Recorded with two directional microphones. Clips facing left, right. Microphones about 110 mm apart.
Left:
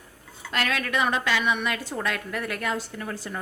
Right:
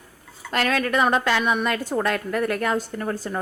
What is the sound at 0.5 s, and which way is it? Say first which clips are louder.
A woman's voice: right 5 dB; 40° right (ahead or behind).